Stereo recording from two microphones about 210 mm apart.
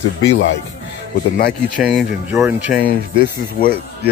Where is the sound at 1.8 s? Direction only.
Centre (ahead or behind).